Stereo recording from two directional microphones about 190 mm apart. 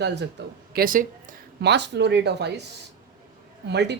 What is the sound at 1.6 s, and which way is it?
A woman's voice, 65° right (ahead or behind).